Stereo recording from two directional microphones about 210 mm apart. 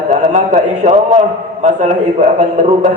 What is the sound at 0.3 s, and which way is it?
Speech, 35° right (ahead or behind).